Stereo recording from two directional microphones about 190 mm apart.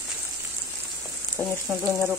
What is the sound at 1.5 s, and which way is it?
Frying, 15° right (ahead or behind).